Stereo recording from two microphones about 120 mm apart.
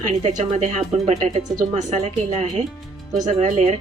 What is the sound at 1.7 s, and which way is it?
Speech, 85° right.